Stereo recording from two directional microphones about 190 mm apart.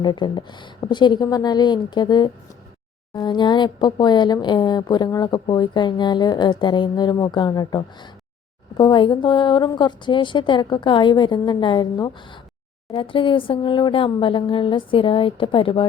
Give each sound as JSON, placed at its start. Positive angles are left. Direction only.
{"t": 0.0, "sound": "speech", "side_deg": 25}